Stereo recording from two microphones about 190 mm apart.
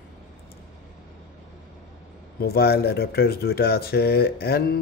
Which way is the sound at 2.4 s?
55° left (ahead or behind).